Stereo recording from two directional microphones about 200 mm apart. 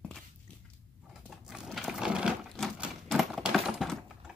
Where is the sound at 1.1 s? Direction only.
Centre (ahead or behind).